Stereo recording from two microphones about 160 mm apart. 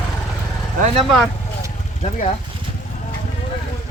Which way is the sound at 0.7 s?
45° right (ahead or behind).